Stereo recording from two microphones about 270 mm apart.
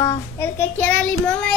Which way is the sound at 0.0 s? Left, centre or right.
Centre.